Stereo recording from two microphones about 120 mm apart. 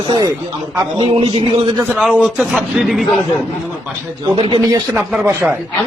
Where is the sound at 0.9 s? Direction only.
45° right (ahead or behind).